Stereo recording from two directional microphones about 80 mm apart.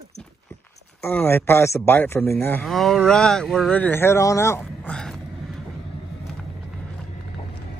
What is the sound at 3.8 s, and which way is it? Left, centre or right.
Speech, left.